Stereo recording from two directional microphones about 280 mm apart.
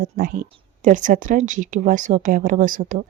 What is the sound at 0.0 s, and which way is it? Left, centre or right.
A woman's voice, right.